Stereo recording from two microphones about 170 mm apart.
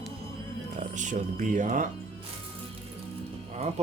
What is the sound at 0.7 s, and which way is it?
Speech, 45° right (ahead or behind).